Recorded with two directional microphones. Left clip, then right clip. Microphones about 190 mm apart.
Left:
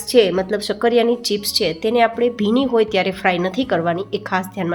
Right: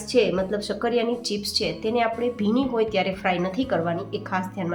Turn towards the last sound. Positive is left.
turn(degrees=40)  # may be behind; listen again after turning